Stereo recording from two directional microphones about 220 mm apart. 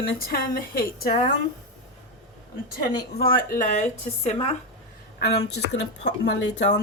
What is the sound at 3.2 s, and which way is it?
Speech, 40° left (ahead or behind).